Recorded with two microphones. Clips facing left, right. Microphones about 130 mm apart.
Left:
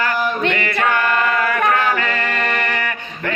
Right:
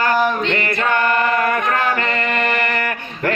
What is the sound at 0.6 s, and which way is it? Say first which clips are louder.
Chant: even; 45° right (ahead or behind).